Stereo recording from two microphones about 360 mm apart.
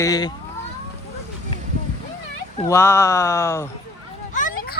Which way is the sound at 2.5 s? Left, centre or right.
Centre.